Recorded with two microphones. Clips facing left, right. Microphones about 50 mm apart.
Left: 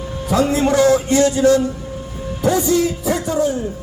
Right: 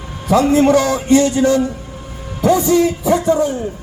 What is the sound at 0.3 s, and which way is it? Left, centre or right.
Speech, right.